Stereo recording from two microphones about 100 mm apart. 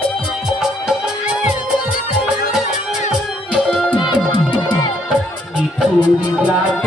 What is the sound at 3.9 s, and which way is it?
Music, 50° left (ahead or behind).